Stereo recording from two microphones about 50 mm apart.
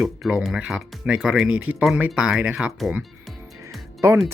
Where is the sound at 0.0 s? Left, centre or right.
Centre.